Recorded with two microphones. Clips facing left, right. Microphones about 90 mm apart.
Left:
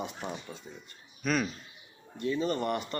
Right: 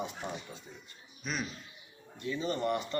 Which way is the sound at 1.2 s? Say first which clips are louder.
Left 8 dB; 55° left (ahead or behind).